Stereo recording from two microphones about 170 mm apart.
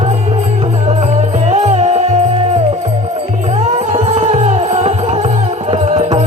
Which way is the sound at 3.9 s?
35° right (ahead or behind).